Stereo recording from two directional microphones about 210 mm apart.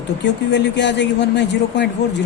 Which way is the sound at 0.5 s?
55° left (ahead or behind).